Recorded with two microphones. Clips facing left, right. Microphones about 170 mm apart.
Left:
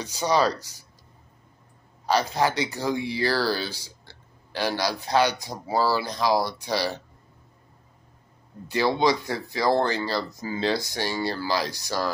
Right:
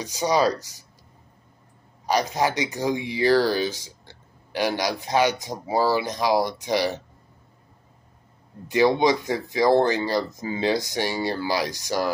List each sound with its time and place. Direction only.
0.0 s speech: 15° right (ahead or behind)
2.0 s speech: 15° right (ahead or behind)
8.6 s speech: 15° right (ahead or behind)